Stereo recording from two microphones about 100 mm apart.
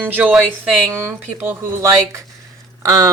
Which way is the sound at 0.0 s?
15° right (ahead or behind).